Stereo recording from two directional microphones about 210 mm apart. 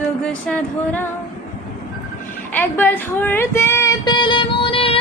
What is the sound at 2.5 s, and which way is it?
Speech, 10° left (ahead or behind).